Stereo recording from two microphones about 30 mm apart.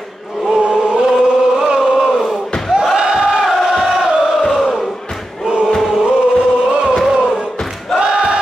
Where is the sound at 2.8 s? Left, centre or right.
Centre.